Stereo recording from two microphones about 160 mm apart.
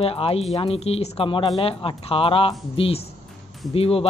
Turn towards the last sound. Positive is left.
turn(degrees=35)  # may be behind; listen again after turning